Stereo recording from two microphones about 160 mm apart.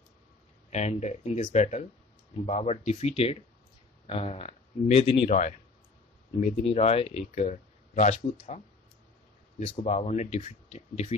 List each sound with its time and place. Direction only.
0.7 s speech: 45° left (ahead or behind)
9.8 s speech: 45° left (ahead or behind)